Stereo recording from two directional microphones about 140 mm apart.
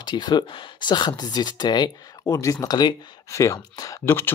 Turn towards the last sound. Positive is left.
turn(degrees=15)  # may be behind; listen again after turning